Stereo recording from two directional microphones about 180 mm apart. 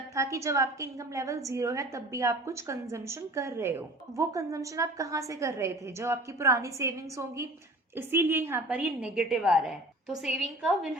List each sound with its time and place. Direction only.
0.1 s a woman's voice: 15° right (ahead or behind)